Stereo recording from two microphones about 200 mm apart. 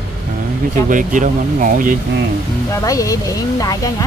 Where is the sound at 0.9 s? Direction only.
40° right (ahead or behind).